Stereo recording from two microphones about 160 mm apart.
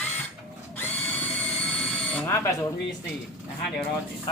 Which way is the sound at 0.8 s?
10° left (ahead or behind).